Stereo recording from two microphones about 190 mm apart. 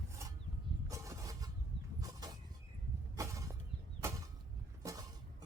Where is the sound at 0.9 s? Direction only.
15° right (ahead or behind).